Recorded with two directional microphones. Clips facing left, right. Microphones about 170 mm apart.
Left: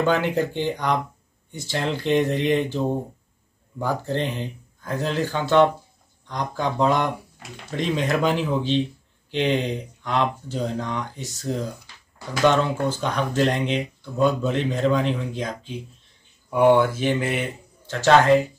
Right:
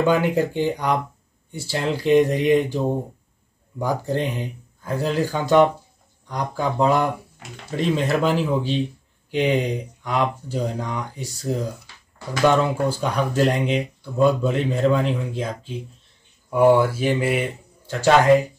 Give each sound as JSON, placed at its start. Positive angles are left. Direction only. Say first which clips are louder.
{"t": 0.0, "sound": "speech", "louder": "right 2 dB", "side_deg": -10}